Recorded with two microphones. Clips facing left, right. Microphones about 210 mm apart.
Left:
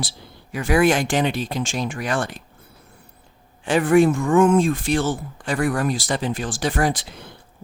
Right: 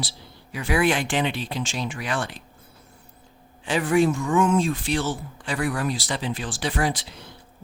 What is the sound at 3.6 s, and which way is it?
Speech, 50° left (ahead or behind).